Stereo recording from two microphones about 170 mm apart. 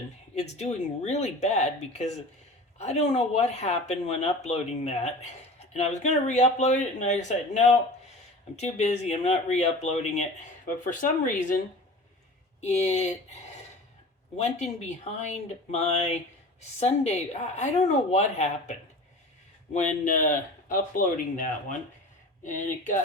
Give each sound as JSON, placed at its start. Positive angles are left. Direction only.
{"t": 0.3, "sound": "speech", "side_deg": 40}
{"t": 12.6, "sound": "speech", "side_deg": 40}
{"t": 14.3, "sound": "speech", "side_deg": 40}
{"t": 19.7, "sound": "speech", "side_deg": 45}